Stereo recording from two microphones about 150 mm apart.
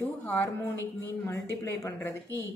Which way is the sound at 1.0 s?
15° left (ahead or behind).